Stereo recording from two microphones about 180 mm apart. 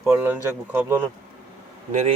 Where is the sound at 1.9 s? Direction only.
40° right (ahead or behind).